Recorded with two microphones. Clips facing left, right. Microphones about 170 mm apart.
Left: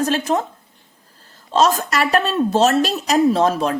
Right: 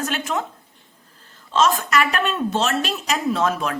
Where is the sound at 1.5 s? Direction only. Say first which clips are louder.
Left 2 dB; 35° left (ahead or behind).